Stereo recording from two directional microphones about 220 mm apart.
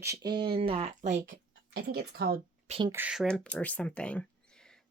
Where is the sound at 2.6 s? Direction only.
25° right (ahead or behind).